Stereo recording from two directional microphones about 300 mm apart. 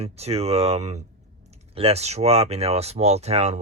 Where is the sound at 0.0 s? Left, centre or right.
Right.